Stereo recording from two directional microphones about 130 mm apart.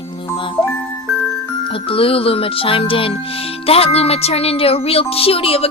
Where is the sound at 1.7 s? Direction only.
45° left (ahead or behind).